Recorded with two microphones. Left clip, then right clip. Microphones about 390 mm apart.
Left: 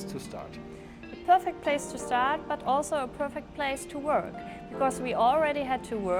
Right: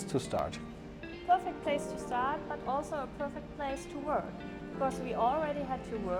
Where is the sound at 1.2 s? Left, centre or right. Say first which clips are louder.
Left 6 dB; left.